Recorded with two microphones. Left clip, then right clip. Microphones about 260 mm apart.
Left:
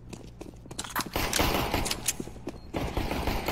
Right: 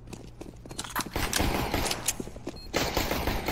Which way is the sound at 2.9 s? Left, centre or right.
Centre.